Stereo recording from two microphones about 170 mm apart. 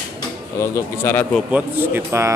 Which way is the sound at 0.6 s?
15° left (ahead or behind).